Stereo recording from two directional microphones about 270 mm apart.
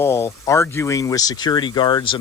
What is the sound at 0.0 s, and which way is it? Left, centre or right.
Speech, centre.